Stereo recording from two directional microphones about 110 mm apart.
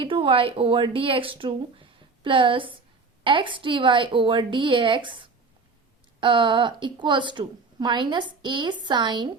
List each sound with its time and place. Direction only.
0.0 s a woman's voice: 50° right (ahead or behind)